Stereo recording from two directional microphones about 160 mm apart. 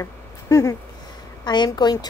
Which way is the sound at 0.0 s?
20° left (ahead or behind).